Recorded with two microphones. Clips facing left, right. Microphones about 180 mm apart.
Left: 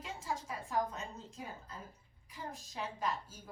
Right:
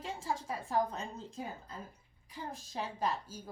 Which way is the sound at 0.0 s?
30° right (ahead or behind).